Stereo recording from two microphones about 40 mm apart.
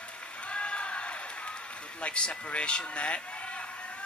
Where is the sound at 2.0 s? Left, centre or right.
Left.